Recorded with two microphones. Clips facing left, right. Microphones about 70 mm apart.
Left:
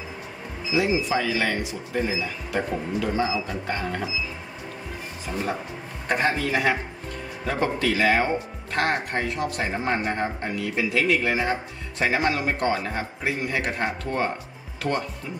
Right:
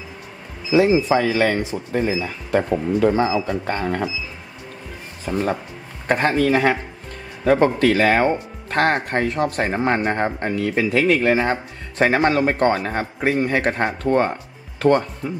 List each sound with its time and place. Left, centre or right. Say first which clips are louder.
0.7 s speech: right 7 dB; right
6.0 s speech: right 6 dB; right